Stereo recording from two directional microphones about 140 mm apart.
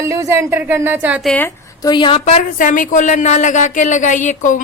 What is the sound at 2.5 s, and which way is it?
A woman's voice, 70° left (ahead or behind).